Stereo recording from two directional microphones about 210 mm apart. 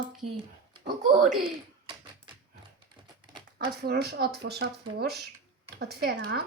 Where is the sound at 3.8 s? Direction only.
50° right (ahead or behind).